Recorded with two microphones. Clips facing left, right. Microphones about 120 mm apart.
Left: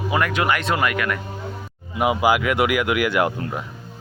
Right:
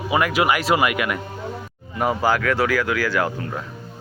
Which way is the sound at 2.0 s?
10° left (ahead or behind).